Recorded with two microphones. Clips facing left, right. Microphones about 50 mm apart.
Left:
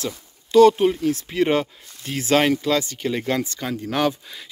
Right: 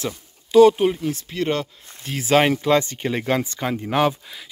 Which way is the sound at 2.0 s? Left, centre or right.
Centre.